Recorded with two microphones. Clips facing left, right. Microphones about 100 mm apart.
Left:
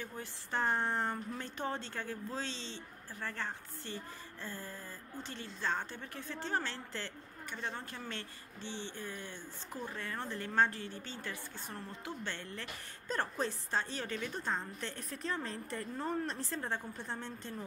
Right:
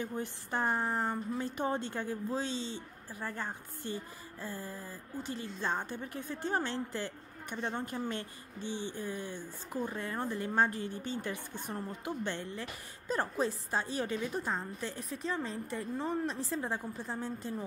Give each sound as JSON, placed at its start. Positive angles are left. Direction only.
{"t": 0.0, "sound": "a woman's voice", "side_deg": -20}
{"t": 13.1, "sound": "a woman's voice", "side_deg": -5}